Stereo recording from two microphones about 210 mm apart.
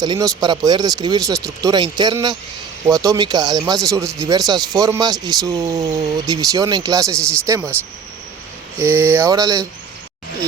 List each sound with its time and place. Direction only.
0.0 s speech: 20° right (ahead or behind)
8.8 s speech: 10° right (ahead or behind)